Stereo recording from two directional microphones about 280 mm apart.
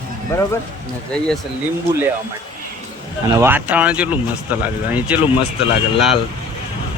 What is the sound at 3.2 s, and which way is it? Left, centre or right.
Speech, centre.